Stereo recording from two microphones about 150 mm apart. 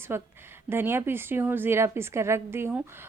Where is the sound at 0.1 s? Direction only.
15° right (ahead or behind).